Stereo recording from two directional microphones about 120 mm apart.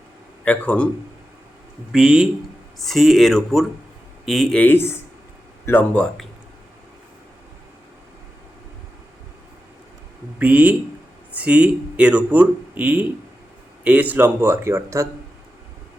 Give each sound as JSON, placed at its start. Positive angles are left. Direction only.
{"t": 0.4, "sound": "speech", "side_deg": 10}
{"t": 1.9, "sound": "speech", "side_deg": -5}
{"t": 4.6, "sound": "speech", "side_deg": 20}
{"t": 10.3, "sound": "speech", "side_deg": -15}